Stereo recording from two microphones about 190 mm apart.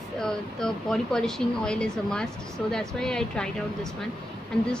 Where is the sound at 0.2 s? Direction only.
5° left (ahead or behind).